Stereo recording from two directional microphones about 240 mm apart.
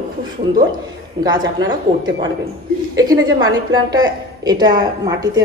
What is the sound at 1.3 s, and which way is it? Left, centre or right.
A woman's voice, centre.